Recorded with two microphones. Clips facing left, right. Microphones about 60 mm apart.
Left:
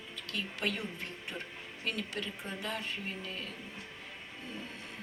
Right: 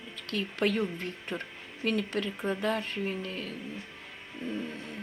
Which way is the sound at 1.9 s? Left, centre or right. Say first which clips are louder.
Right 8 dB; right.